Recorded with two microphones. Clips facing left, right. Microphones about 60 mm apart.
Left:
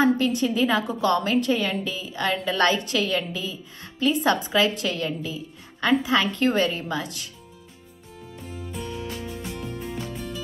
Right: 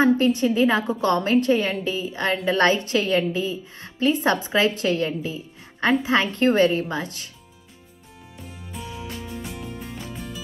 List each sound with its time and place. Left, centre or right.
0.0 s a woman's voice: right
8.5 s music: centre